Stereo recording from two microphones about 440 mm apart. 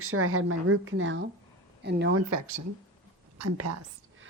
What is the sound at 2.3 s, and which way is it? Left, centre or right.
A woman's voice, right.